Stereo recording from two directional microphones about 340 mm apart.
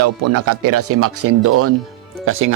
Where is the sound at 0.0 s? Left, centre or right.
Right.